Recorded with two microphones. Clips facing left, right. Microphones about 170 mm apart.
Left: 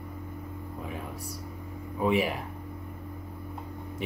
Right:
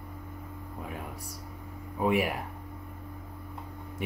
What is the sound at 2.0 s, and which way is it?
Speech, 10° right (ahead or behind).